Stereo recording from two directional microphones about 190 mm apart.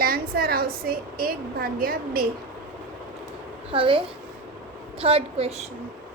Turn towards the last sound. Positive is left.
turn(degrees=-30)  # may be behind; listen again after turning